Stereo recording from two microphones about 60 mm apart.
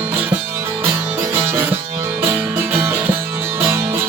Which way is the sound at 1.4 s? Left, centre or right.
Right.